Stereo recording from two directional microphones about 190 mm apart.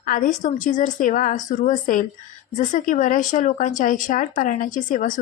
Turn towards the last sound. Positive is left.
turn(degrees=45)  # may be behind; listen again after turning